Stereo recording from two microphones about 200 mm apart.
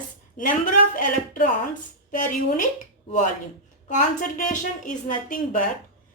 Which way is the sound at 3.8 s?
40° left (ahead or behind).